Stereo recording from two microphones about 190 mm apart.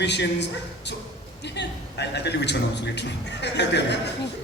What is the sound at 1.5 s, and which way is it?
A man's voice, 65° left (ahead or behind).